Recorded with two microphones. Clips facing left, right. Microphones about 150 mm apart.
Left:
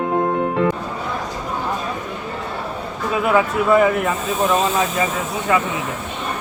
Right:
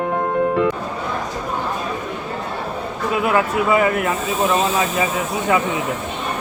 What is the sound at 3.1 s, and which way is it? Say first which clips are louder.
Speech: left 1 dB; centre (ahead or behind).